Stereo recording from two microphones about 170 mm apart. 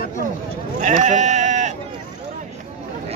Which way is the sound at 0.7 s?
45° right (ahead or behind).